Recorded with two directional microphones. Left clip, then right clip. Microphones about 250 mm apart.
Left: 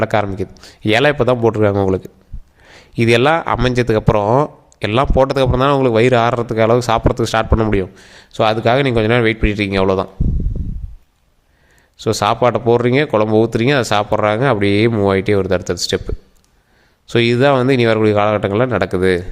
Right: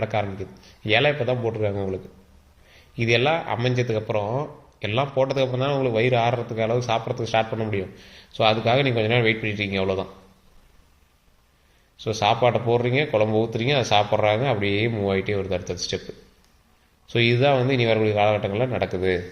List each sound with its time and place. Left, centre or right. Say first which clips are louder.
0.0 s a man's voice: left 9 dB; left
11.9 s a man's voice: left 6 dB; left
17.1 s a man's voice: left 7 dB; left